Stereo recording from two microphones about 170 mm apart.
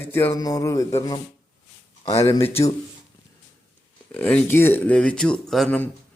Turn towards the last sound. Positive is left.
turn(degrees=5)  # may be behind; listen again after turning